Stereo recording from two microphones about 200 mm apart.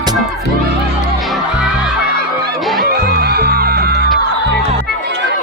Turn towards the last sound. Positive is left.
turn(degrees=-55)  # may be behind; listen again after turning